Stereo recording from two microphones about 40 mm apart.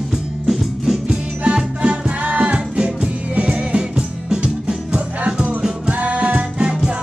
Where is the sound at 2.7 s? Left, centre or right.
Right.